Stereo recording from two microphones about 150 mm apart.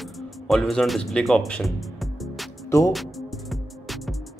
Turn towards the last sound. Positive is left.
turn(degrees=0)  # may be behind; listen again after turning